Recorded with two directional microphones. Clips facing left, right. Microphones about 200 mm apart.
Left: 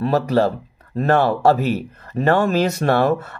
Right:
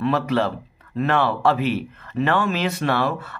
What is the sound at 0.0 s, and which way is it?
Speech, 40° left (ahead or behind).